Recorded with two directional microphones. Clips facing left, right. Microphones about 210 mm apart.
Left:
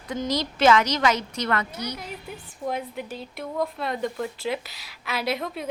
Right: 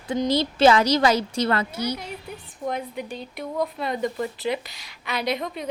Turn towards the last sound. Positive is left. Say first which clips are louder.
# right 1 dB
turn(degrees=0)  # may be behind; listen again after turning